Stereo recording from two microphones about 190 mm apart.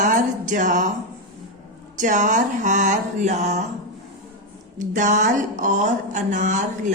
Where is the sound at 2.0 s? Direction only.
40° right (ahead or behind).